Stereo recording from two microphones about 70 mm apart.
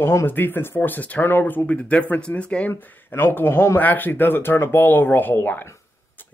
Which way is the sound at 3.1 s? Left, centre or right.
Left.